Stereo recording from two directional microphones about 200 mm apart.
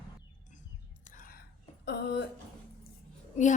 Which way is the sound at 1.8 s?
60° left (ahead or behind).